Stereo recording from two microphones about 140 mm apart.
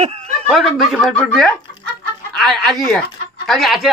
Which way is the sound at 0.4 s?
Centre (ahead or behind).